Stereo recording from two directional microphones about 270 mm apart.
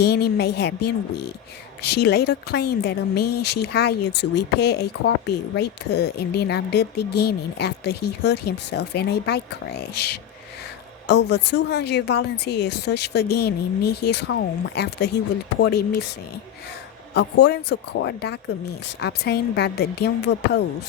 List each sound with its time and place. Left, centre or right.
0.0 s speech: left
17.2 s speech: left